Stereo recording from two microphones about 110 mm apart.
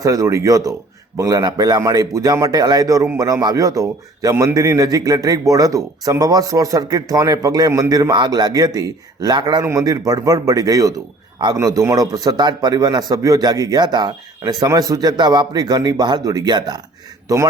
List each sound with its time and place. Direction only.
0.0 s a man's voice: 30° right (ahead or behind)